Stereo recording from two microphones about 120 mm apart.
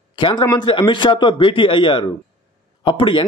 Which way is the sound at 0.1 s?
40° left (ahead or behind).